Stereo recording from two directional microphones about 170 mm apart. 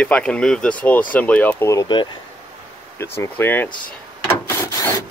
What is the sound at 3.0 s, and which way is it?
Speech, 15° left (ahead or behind).